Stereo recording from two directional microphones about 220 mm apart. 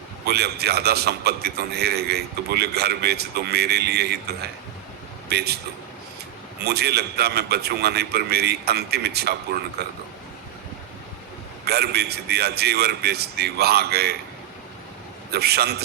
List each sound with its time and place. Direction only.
0.3 s a man's voice: 45° right (ahead or behind)
6.7 s a man's voice: 45° right (ahead or behind)
11.6 s a man's voice: 45° right (ahead or behind)
15.3 s a man's voice: 45° right (ahead or behind)